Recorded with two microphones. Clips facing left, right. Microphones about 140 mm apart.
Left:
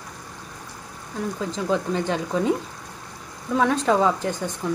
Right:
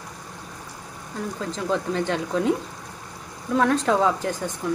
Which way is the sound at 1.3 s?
Centre (ahead or behind).